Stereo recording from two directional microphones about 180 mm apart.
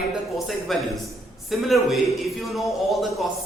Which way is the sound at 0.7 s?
Centre (ahead or behind).